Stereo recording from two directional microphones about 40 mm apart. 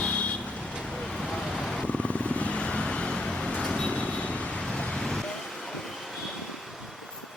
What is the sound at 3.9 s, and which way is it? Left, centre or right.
Vehicle, left.